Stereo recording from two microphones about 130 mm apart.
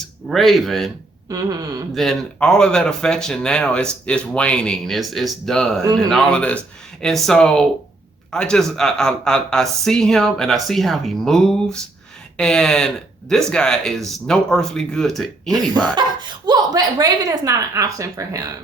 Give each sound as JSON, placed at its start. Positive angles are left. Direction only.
{"t": 0.3, "sound": "speech", "side_deg": 0}
{"t": 1.3, "sound": "speech", "side_deg": -25}
{"t": 2.0, "sound": "speech", "side_deg": 5}
{"t": 5.8, "sound": "speech", "side_deg": -30}
{"t": 6.1, "sound": "speech", "side_deg": 5}
{"t": 16.0, "sound": "speech", "side_deg": -35}